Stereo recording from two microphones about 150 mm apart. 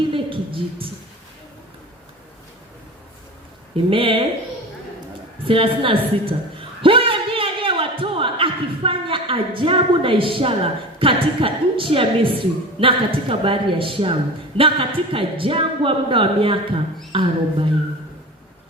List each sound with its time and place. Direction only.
0.1 s a sound: 35° right (ahead or behind)
3.8 s a man's voice: 35° right (ahead or behind)
5.5 s a woman's voice: 35° right (ahead or behind)